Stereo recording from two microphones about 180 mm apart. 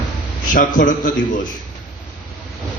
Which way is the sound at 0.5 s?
45° left (ahead or behind).